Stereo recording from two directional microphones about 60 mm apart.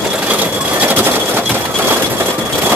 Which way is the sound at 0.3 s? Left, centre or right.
Right.